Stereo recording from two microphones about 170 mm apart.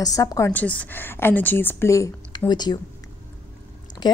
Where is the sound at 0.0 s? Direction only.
20° left (ahead or behind).